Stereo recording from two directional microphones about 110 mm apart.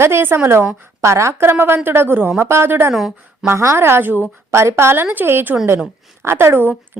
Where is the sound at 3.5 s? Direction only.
25° right (ahead or behind).